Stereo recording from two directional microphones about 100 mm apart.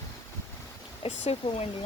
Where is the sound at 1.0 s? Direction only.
75° left (ahead or behind).